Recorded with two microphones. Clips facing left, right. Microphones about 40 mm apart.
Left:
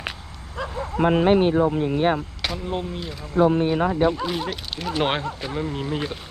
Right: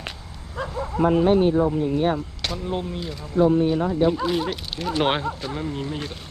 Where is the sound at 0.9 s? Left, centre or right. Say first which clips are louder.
Even; left.